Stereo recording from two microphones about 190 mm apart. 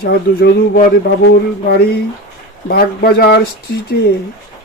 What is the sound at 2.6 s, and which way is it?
Speech, 50° left (ahead or behind).